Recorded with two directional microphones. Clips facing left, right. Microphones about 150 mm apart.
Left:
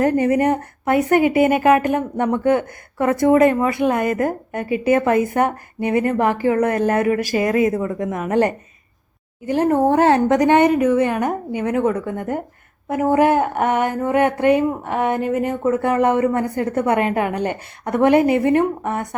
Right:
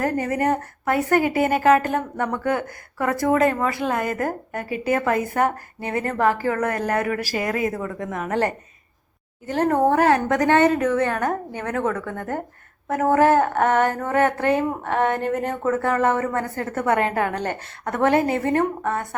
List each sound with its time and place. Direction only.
0.0 s a woman's voice: 20° left (ahead or behind)